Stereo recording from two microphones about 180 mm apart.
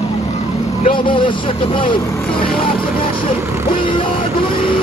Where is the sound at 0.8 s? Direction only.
30° left (ahead or behind).